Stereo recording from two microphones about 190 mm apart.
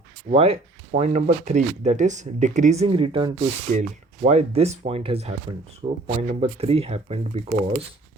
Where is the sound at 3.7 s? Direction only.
40° right (ahead or behind).